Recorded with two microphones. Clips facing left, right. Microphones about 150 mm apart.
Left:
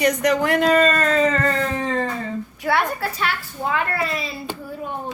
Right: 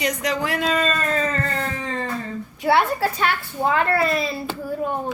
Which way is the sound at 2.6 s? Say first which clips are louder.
Right 3 dB; 20° right (ahead or behind).